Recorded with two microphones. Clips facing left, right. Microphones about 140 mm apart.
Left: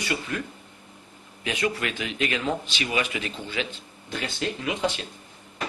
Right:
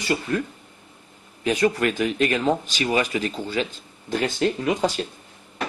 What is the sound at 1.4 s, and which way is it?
Speech, 40° right (ahead or behind).